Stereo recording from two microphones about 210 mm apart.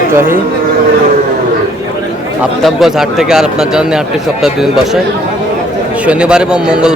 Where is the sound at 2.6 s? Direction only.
Centre (ahead or behind).